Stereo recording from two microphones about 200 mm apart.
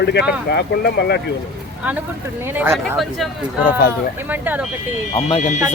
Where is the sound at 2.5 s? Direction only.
10° right (ahead or behind).